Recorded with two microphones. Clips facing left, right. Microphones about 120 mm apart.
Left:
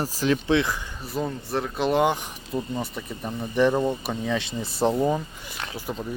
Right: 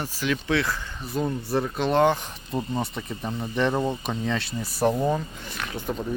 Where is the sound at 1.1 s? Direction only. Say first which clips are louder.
Right 2 dB; centre (ahead or behind).